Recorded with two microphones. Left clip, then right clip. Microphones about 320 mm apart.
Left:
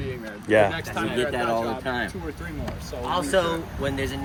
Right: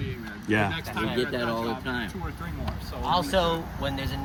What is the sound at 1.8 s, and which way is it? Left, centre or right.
Speech, centre.